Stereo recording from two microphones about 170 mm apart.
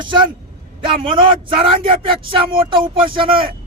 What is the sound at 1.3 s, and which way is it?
Speech, 30° right (ahead or behind).